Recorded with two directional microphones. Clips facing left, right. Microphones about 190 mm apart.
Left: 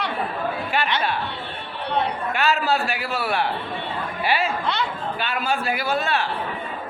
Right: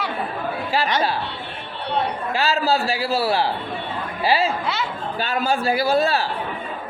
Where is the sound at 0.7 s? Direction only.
35° right (ahead or behind).